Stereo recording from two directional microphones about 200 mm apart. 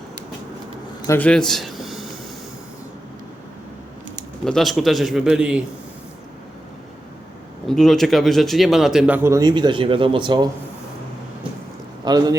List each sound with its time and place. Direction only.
1.0 s a sound: 10° left (ahead or behind)
4.4 s a man's voice: centre (ahead or behind)
7.7 s speech: centre (ahead or behind); by 10.5 s 20° right (ahead or behind)
12.0 s speech: 20° right (ahead or behind)